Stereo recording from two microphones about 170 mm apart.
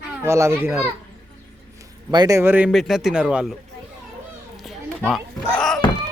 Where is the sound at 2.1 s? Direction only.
20° right (ahead or behind); by 3.6 s 5° right (ahead or behind).